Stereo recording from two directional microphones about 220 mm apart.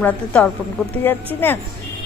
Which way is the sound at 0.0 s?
5° left (ahead or behind).